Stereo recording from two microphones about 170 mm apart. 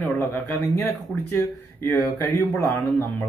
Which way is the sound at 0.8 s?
15° left (ahead or behind).